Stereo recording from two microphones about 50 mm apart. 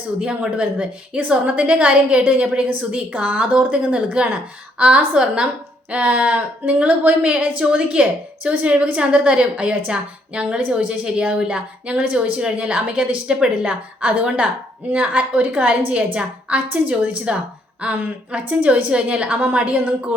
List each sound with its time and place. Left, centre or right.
0.2 s a woman's voice: right